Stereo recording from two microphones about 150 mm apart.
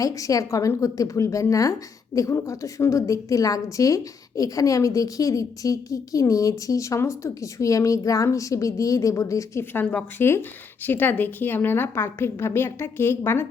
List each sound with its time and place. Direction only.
0.0 s a woman's voice: 20° left (ahead or behind)